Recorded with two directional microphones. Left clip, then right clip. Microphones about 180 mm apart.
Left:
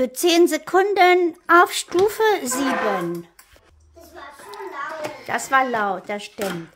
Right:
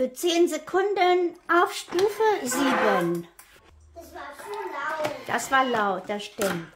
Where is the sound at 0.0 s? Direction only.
40° left (ahead or behind).